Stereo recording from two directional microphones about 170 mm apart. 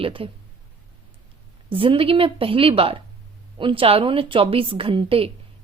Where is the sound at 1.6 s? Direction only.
30° right (ahead or behind).